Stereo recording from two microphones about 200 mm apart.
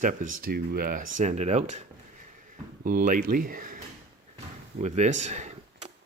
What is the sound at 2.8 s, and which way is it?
Speech, 45° right (ahead or behind).